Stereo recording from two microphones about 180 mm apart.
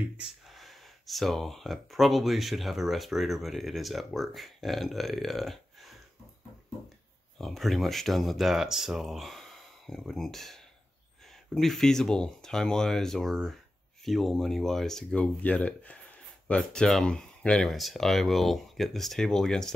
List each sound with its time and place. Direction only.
0.6 s speech: centre (ahead or behind)
7.3 s speech: centre (ahead or behind)